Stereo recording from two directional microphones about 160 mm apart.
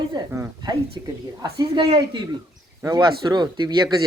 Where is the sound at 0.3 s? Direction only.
20° right (ahead or behind).